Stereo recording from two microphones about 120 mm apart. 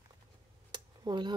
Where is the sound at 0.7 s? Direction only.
40° right (ahead or behind).